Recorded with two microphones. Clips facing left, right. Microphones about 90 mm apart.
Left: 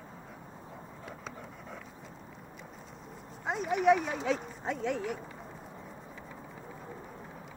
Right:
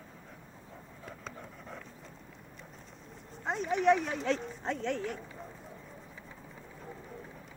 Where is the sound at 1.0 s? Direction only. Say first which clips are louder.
Even; centre (ahead or behind).